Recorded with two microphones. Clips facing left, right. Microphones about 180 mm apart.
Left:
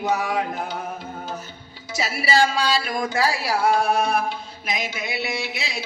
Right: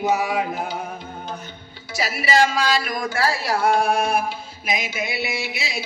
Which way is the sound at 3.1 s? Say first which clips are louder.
Right 1 dB; 15° left (ahead or behind).